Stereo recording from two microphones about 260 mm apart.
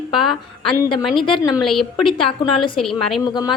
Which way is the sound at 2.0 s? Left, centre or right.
Centre.